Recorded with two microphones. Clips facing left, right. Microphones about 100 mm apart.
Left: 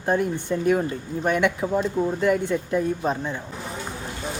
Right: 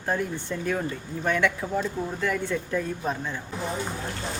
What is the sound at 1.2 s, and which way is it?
Speech, 15° left (ahead or behind).